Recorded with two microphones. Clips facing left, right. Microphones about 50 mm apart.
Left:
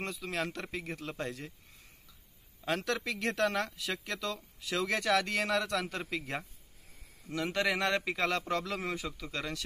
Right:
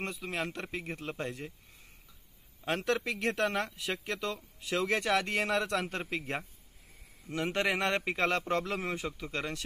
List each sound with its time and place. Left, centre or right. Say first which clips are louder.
0.0 s speech: even; right
2.6 s a man's voice: right 2 dB; right